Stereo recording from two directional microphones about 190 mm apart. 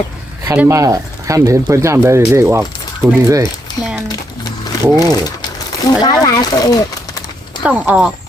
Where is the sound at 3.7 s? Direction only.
25° left (ahead or behind).